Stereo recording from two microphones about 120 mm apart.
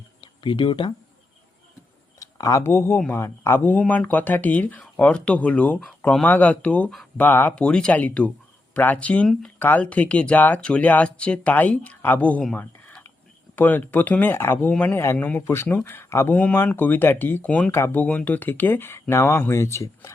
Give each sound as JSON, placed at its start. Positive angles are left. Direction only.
{"t": 0.2, "sound": "speech", "side_deg": 40}
{"t": 2.1, "sound": "speech", "side_deg": 30}